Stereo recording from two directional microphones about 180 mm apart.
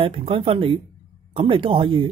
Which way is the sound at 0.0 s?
30° right (ahead or behind).